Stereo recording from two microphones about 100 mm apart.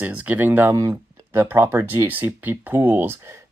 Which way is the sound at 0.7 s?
30° right (ahead or behind).